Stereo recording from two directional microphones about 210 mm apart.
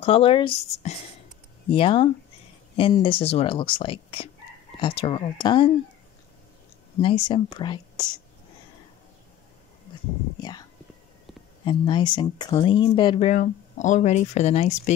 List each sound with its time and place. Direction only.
0.0 s speech: 25° left (ahead or behind)
7.0 s speech: 25° left (ahead or behind)
11.6 s speech: 20° left (ahead or behind)